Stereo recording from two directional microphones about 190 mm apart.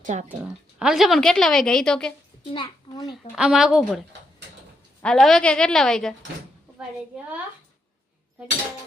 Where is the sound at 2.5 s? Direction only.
25° left (ahead or behind).